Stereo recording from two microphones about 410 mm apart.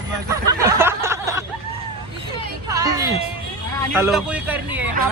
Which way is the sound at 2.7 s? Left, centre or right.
Centre.